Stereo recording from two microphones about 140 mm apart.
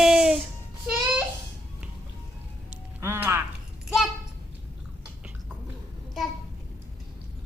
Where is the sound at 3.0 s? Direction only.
15° right (ahead or behind).